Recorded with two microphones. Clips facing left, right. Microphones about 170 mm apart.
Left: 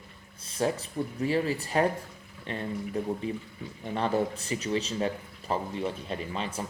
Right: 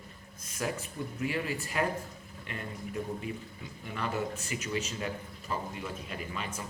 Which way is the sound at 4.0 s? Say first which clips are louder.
Left 6 dB; 35° left (ahead or behind).